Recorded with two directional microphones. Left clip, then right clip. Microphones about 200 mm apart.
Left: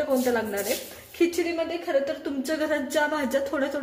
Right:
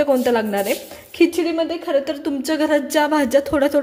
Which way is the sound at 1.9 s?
40° right (ahead or behind).